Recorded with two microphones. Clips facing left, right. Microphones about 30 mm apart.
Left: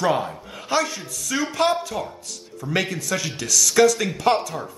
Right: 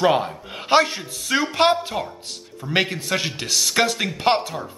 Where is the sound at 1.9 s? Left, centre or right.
Right.